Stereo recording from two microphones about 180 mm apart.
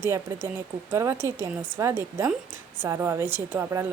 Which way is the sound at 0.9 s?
15° right (ahead or behind).